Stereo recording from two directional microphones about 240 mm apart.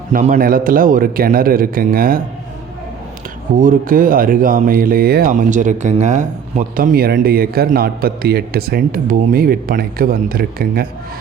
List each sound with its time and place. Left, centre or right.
0.1 s speech: right
3.5 s speech: right